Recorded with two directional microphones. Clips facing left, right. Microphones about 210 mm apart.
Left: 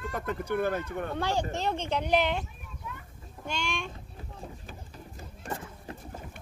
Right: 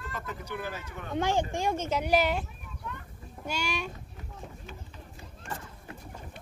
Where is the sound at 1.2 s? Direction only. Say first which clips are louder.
Right 4 dB; 15° right (ahead or behind).